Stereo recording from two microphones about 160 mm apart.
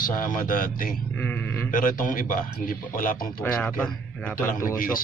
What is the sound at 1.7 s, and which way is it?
A man's voice, 55° left (ahead or behind).